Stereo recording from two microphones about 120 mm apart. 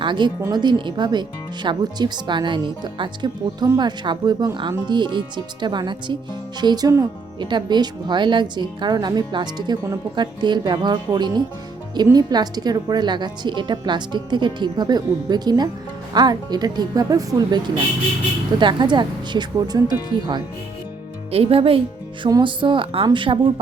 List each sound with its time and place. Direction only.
0.0 s speech: 40° right (ahead or behind)
21.3 s speech: 50° right (ahead or behind)
22.3 s speech: 40° right (ahead or behind)